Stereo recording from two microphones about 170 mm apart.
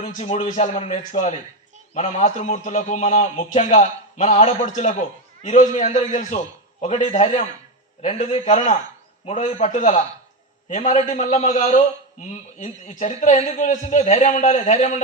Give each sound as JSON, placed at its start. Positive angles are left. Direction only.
{"t": 0.0, "sound": "a man's voice", "side_deg": 40}